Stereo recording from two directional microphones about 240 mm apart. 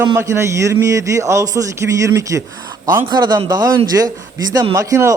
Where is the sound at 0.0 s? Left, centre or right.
Centre.